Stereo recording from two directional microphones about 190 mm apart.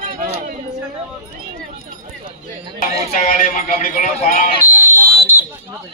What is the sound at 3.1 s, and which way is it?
A man's voice, 45° left (ahead or behind).